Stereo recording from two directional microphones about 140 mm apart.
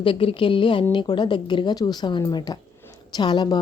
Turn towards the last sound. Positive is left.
turn(degrees=30)  # may be behind; listen again after turning